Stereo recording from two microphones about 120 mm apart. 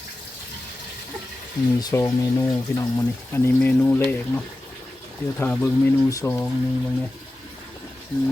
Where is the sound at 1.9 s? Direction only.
25° left (ahead or behind).